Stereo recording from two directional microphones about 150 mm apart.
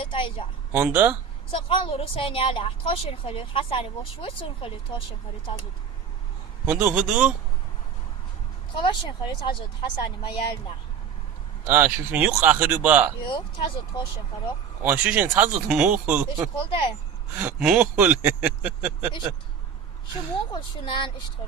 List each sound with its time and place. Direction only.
0.0 s a woman's voice: 35° left (ahead or behind)
0.7 s speech: 15° right (ahead or behind)
1.5 s a woman's voice: 35° left (ahead or behind)
6.7 s speech: 10° right (ahead or behind)
8.7 s a woman's voice: 30° left (ahead or behind)
11.6 s speech: 15° right (ahead or behind)
13.2 s a woman's voice: 35° left (ahead or behind)
14.8 s speech: 10° right (ahead or behind)
16.6 s a woman's voice: 35° left (ahead or behind)
17.4 s speech: 5° right (ahead or behind)
20.5 s a woman's voice: 35° left (ahead or behind)